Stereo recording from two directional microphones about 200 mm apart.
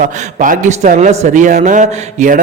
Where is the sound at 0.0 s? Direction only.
45° right (ahead or behind).